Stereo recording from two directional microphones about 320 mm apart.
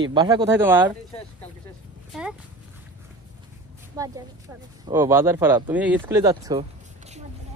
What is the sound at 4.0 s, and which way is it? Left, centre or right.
Speech, centre.